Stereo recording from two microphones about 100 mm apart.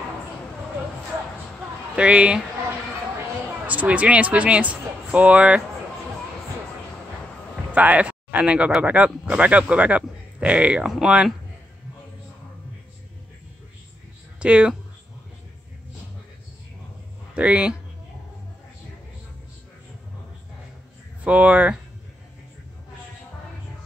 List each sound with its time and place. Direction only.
2.0 s speech: 10° right (ahead or behind)
3.6 s speech: 15° right (ahead or behind)
7.7 s speech: 15° right (ahead or behind)
14.4 s speech: 10° right (ahead or behind)
17.3 s speech: 10° right (ahead or behind)
21.2 s speech: 15° right (ahead or behind)